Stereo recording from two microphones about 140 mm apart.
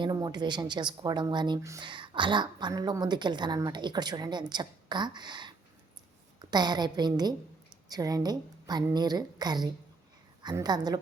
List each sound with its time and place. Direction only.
0.0 s a woman's voice: 30° right (ahead or behind)